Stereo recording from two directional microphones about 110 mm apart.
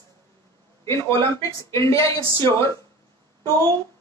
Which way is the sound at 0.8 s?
25° left (ahead or behind).